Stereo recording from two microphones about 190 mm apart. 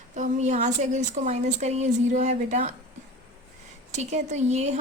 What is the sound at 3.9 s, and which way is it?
Speech, 35° right (ahead or behind).